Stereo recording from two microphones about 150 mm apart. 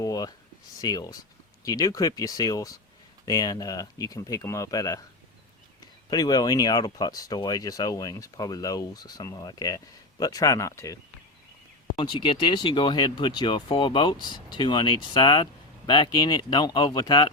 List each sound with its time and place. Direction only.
0.0 s a sound: 25° left (ahead or behind)
0.8 s speech: 25° left (ahead or behind)
6.1 s speech: 25° left (ahead or behind)
11.9 s speech: 35° left (ahead or behind)